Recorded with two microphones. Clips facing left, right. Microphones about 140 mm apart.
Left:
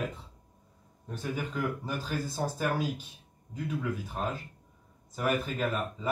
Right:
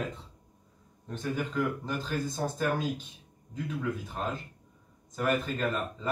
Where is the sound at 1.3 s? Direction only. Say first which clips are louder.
Right 3 dB; 10° left (ahead or behind).